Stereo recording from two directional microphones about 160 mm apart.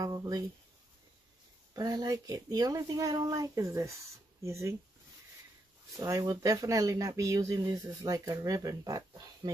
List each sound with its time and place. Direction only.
0.0 s speech: 20° right (ahead or behind)
1.7 s speech: 25° right (ahead or behind)
5.9 s speech: 20° right (ahead or behind)